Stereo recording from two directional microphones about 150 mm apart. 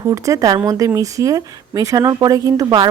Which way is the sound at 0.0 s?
20° right (ahead or behind).